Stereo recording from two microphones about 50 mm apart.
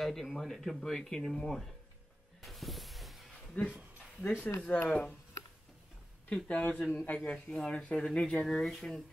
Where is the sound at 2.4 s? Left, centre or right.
Centre.